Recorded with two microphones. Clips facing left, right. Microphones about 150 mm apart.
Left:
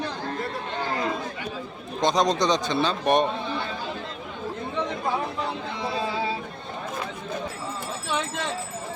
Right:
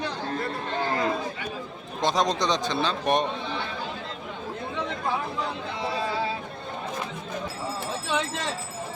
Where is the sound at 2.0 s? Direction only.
Centre (ahead or behind).